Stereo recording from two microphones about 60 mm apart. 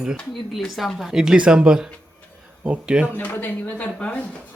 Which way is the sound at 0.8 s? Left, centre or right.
Centre.